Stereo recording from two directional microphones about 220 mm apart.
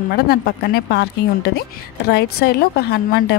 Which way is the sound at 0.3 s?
45° left (ahead or behind).